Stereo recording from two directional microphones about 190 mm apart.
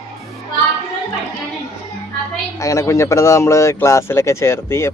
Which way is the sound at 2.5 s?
15° left (ahead or behind).